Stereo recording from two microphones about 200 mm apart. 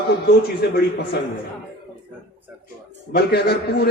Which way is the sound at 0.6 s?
55° left (ahead or behind).